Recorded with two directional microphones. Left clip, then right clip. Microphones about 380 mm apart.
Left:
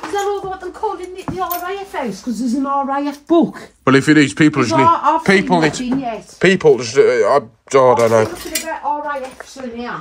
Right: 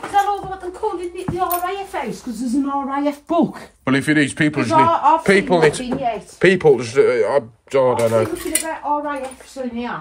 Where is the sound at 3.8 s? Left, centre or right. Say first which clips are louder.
Left 6 dB; centre.